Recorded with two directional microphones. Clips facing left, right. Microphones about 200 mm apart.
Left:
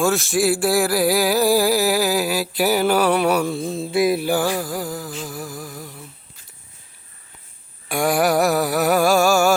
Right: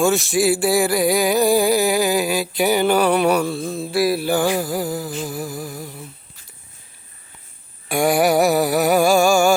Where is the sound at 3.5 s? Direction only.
20° left (ahead or behind).